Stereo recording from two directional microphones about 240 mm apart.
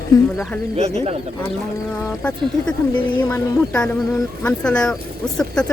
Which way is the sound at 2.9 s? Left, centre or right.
Centre.